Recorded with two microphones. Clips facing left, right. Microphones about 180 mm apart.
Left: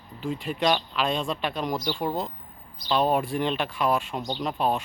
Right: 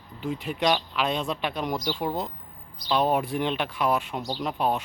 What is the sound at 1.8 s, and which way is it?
Speech, centre (ahead or behind).